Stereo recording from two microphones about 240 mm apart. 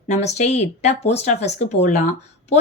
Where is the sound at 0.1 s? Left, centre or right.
Left.